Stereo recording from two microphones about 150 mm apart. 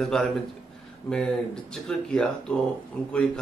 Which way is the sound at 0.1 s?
5° left (ahead or behind).